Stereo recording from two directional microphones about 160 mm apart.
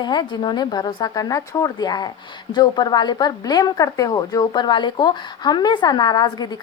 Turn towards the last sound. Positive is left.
turn(degrees=25)  # may be behind; listen again after turning